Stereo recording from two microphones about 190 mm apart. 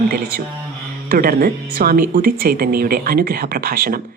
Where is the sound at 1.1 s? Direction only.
50° right (ahead or behind).